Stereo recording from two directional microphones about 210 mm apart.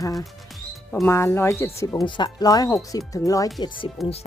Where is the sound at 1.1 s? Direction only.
10° left (ahead or behind).